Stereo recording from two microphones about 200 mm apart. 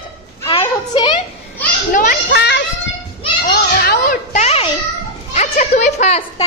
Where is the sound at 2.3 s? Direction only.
60° left (ahead or behind).